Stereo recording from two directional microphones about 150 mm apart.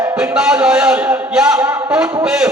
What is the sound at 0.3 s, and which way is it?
A man's voice, 5° right (ahead or behind).